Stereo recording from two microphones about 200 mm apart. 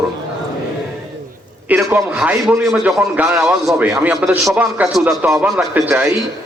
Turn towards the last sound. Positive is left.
turn(degrees=-5)  # may be behind; listen again after turning